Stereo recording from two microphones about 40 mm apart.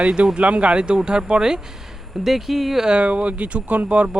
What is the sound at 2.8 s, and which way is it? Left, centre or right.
Speech, right.